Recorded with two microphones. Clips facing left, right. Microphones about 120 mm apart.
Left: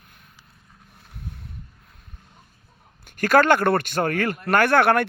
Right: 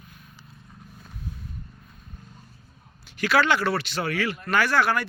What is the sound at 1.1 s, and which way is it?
Vehicle, 65° left (ahead or behind).